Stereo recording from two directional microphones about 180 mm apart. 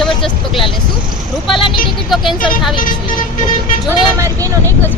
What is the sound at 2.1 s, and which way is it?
Speech, centre (ahead or behind).